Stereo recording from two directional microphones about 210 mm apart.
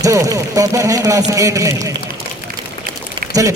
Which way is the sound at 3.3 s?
15° right (ahead or behind).